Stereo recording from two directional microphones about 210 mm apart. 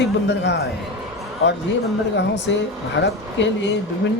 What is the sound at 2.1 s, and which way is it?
Speech, 55° left (ahead or behind).